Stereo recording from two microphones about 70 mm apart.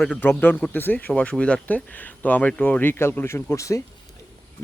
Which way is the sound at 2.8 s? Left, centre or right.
Left.